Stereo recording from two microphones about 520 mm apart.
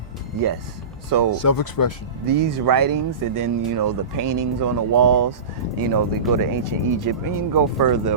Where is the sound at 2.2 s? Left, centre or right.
Right.